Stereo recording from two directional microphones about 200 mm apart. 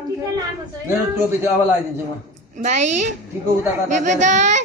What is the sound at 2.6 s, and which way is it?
A child's voice, 35° right (ahead or behind).